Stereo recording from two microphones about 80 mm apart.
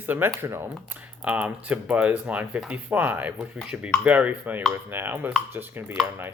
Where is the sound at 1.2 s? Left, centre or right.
Centre.